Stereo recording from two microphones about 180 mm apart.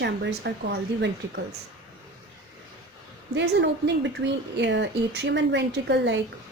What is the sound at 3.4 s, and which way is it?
Speech, 80° right.